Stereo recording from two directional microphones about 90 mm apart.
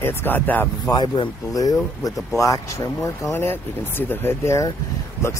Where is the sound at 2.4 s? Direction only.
35° left (ahead or behind).